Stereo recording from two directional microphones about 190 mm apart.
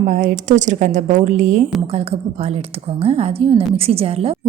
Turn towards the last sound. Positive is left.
turn(degrees=-30)  # may be behind; listen again after turning